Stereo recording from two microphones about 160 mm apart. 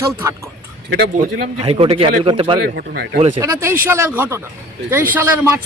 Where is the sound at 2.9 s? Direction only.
90° right.